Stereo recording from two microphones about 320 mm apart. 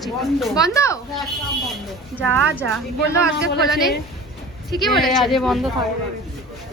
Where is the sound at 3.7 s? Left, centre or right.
Centre.